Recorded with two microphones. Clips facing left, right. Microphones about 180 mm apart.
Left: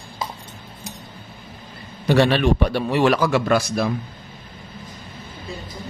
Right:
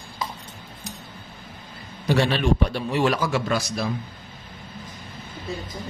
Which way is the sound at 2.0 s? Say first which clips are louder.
Left 4 dB; 65° left (ahead or behind).